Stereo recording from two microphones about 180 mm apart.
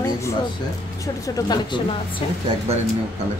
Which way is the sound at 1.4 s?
25° left (ahead or behind).